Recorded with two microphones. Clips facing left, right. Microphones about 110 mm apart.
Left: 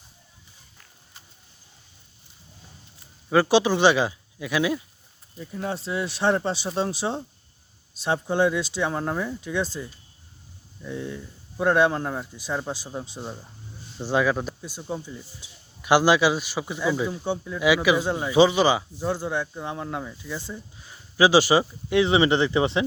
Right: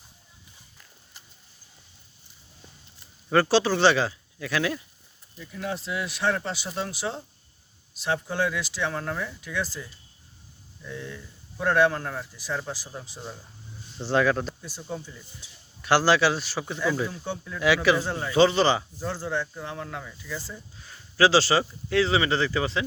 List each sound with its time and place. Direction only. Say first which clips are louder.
3.2 s a man's voice: left 2 dB; 10° left (ahead or behind)
5.4 s speech: left 2 dB; 30° left (ahead or behind)
14.0 s a man's voice: even; 10° left (ahead or behind)